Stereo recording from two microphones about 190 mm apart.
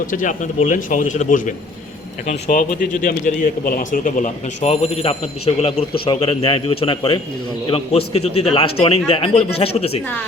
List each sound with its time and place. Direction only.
0.1 s a man's voice: 45° left (ahead or behind)